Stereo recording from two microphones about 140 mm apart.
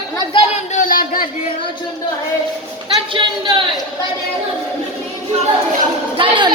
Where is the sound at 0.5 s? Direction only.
65° left (ahead or behind); by 1.3 s 90° left.